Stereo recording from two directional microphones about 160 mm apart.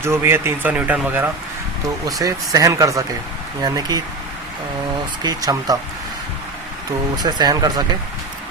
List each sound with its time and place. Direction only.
0.0 s speech: 15° right (ahead or behind)
2.0 s speech: 20° right (ahead or behind)
5.2 s speech: 25° right (ahead or behind)
7.2 s speech: 25° right (ahead or behind)